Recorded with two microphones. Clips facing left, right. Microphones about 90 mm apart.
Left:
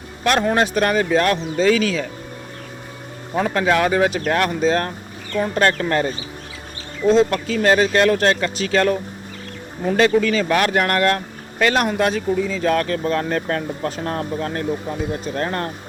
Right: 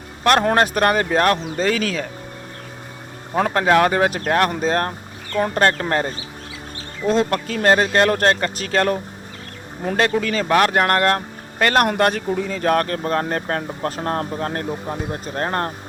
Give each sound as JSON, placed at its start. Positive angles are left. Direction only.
{"t": 0.3, "sound": "speech", "side_deg": -50}
{"t": 3.3, "sound": "speech", "side_deg": -50}
{"t": 7.1, "sound": "speech", "side_deg": -50}
{"t": 11.6, "sound": "speech", "side_deg": -55}
{"t": 13.2, "sound": "speech", "side_deg": -35}
{"t": 13.8, "sound": "speech", "side_deg": -45}